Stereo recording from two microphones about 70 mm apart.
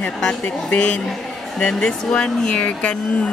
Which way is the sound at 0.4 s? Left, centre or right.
Centre.